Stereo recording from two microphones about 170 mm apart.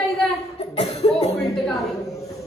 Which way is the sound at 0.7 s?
35° left (ahead or behind).